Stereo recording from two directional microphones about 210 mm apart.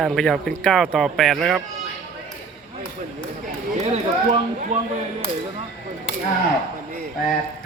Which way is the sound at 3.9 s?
30° right (ahead or behind).